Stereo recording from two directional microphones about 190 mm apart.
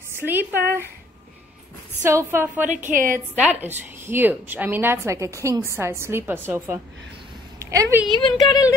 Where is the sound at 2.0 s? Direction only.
15° right (ahead or behind).